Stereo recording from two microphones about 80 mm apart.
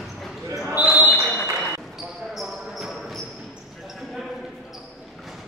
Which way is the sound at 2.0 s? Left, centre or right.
Centre.